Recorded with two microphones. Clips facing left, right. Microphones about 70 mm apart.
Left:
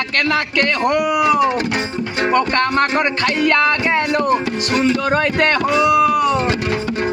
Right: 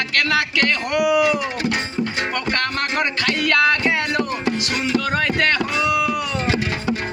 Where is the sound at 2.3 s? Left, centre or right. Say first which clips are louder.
Left 7 dB; left.